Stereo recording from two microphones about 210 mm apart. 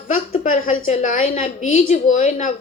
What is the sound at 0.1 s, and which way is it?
A woman's voice, 40° left (ahead or behind).